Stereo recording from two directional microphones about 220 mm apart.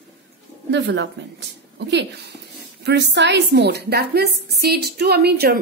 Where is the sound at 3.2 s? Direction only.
50° right (ahead or behind).